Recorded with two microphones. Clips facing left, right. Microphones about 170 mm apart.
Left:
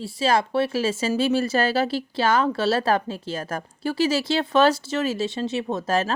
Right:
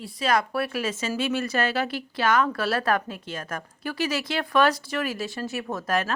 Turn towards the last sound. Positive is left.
turn(degrees=30)  # may be behind; listen again after turning